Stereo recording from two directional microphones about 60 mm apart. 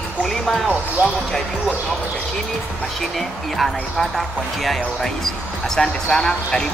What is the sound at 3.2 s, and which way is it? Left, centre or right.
Speech, centre.